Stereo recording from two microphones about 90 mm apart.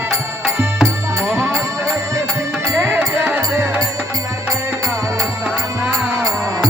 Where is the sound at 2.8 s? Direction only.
25° right (ahead or behind).